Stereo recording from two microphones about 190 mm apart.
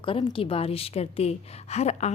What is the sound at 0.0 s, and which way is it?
A woman's voice, 30° left (ahead or behind).